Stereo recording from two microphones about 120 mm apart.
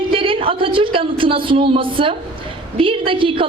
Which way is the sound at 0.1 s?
45° right (ahead or behind).